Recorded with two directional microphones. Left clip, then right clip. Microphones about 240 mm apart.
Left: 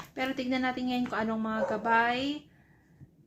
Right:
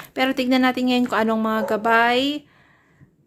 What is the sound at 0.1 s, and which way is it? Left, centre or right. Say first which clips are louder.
Speech: right 12 dB; right.